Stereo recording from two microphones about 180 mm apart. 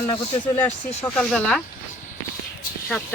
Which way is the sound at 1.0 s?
5° left (ahead or behind).